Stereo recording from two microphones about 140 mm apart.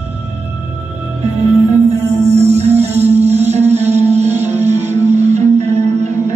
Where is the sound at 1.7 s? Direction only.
50° right (ahead or behind).